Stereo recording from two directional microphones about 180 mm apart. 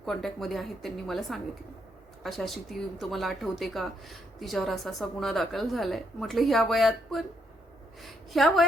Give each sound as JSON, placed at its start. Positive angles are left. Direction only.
{"t": 0.0, "sound": "a woman's voice", "side_deg": 0}